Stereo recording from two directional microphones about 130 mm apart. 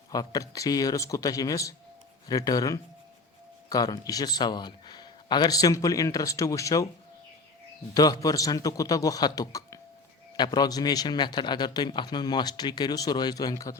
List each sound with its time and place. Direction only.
0.1 s speech: 30° left (ahead or behind)
7.9 s a man's voice: 30° left (ahead or behind)